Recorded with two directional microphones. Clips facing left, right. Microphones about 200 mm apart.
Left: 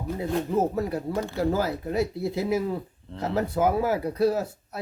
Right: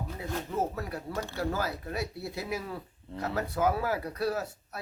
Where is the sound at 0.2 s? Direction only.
25° left (ahead or behind).